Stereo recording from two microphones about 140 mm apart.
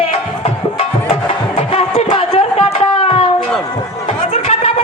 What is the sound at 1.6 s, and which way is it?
Music, 40° left (ahead or behind).